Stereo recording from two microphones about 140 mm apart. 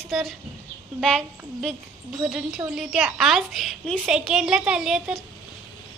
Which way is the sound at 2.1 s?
5° right (ahead or behind).